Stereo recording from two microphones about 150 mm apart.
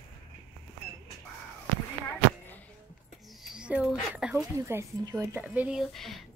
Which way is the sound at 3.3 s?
Centre (ahead or behind).